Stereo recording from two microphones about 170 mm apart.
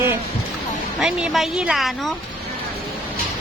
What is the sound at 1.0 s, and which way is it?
Speech, 5° right (ahead or behind).